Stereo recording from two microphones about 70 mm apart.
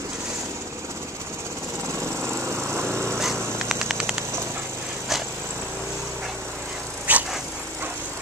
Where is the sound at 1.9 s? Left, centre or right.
Right.